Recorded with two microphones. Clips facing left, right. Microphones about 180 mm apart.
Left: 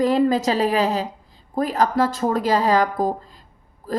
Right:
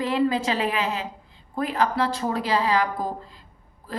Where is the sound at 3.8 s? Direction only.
45° left (ahead or behind).